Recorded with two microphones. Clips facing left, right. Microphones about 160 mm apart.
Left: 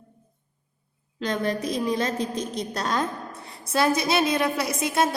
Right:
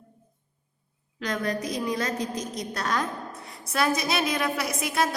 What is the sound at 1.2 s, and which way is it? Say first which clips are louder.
A woman's voice: left 3 dB; 30° left (ahead or behind).